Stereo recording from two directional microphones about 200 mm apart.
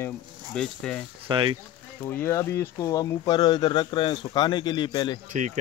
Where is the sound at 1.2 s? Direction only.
25° right (ahead or behind).